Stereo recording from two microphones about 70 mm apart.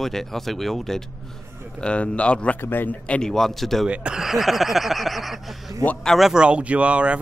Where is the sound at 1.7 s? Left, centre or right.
Centre.